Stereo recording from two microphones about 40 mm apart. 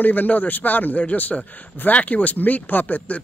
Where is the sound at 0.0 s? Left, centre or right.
Left.